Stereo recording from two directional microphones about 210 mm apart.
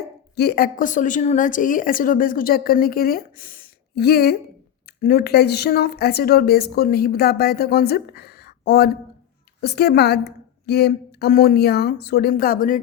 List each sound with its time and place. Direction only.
0.3 s a woman's voice: 50° left (ahead or behind)